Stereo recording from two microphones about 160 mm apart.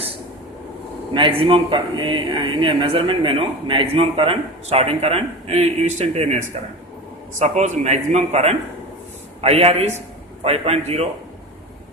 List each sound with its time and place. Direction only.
1.1 s a man's voice: 35° right (ahead or behind)